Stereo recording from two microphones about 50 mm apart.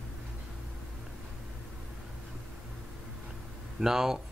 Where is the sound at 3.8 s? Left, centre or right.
Centre.